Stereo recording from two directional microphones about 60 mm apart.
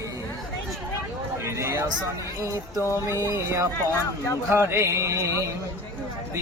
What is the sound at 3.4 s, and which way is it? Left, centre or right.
Speech, right.